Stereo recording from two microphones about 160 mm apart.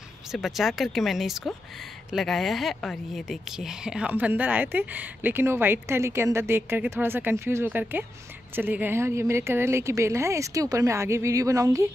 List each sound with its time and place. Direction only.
0.3 s a woman's voice: centre (ahead or behind); by 11.9 s 20° right (ahead or behind)